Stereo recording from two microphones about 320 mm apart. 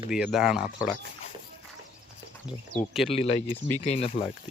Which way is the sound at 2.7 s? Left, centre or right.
Centre.